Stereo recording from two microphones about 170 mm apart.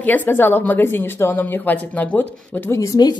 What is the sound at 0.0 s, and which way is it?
A woman's voice, 10° left (ahead or behind).